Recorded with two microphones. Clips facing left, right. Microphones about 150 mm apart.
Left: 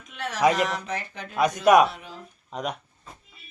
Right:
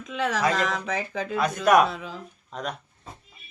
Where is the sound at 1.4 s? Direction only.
10° left (ahead or behind).